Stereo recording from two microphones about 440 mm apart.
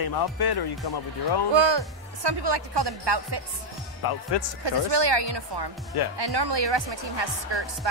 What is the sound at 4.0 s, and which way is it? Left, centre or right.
Speech, left.